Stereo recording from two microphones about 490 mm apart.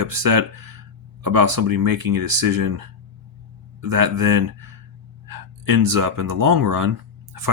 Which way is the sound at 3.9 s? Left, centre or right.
Right.